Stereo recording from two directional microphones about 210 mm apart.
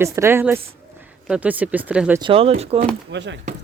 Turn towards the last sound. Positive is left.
turn(degrees=-60)  # may be behind; listen again after turning